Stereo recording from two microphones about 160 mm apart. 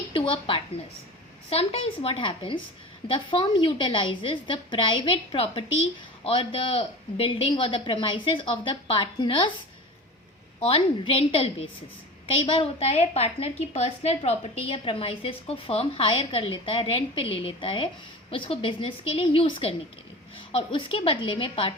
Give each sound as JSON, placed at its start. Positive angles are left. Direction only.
{"t": 0.1, "sound": "a woman's voice", "side_deg": 30}
{"t": 10.7, "sound": "a woman's voice", "side_deg": 35}